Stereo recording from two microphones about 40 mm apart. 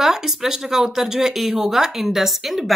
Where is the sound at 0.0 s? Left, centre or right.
Centre.